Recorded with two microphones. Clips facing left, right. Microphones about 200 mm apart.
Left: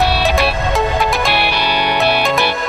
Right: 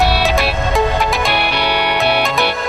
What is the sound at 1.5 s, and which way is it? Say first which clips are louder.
Music: even; 60° right (ahead or behind).